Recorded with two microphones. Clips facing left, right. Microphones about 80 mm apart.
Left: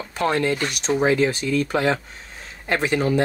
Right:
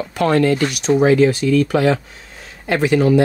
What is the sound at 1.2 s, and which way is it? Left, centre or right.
Speech, left.